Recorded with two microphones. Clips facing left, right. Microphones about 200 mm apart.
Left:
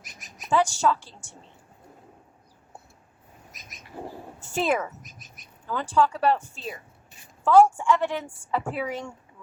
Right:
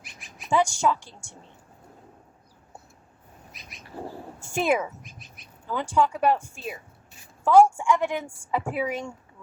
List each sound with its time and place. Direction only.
0.0 s a sound: 40° left (ahead or behind)
0.5 s a woman's voice: 15° right (ahead or behind)
3.5 s bird: 45° left (ahead or behind)
4.4 s speech: 10° right (ahead or behind)
5.0 s bird: 45° left (ahead or behind)
5.6 s a woman's voice: 15° right (ahead or behind)